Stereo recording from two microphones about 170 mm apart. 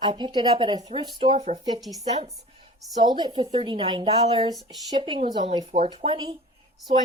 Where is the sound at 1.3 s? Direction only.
40° right (ahead or behind).